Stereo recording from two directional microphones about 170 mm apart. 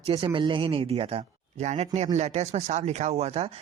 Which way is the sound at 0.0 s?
35° right (ahead or behind).